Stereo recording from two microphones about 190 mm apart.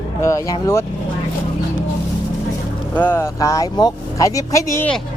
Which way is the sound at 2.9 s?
10° left (ahead or behind).